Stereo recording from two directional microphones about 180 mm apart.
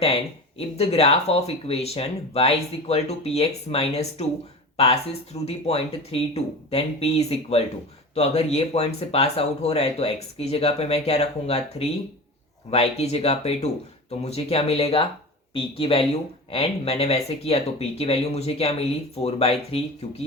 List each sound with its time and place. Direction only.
0.8 s speech: 35° left (ahead or behind)